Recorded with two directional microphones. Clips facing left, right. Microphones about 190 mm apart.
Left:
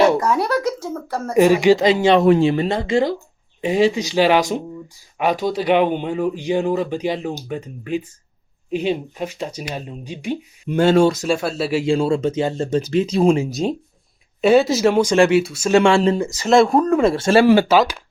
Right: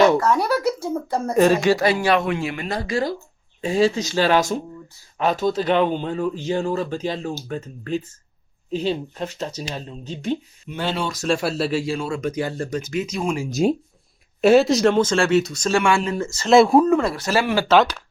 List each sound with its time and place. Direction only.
0.3 s speech: 5° right (ahead or behind)
1.3 s speech: 15° left (ahead or behind)
10.7 s speech: 45° left (ahead or behind)
11.3 s speech: centre (ahead or behind)
11.7 s speech: 20° left (ahead or behind)
11.9 s speech: 30° left (ahead or behind)
13.5 s speech: 5° right (ahead or behind)
15.7 s speech: 30° left (ahead or behind)
16.1 s speech: 15° left (ahead or behind)
16.5 s speech: 5° right (ahead or behind)
17.0 s speech: 25° left (ahead or behind)
17.7 s speech: 10° left (ahead or behind)